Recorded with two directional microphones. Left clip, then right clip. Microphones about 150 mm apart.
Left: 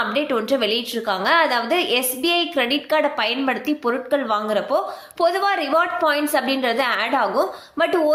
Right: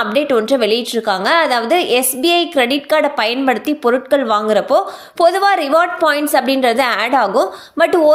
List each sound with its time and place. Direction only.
0.0 s a woman's voice: 45° right (ahead or behind)